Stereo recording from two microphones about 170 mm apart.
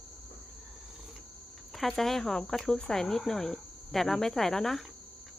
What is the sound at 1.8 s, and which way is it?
Speech, centre (ahead or behind).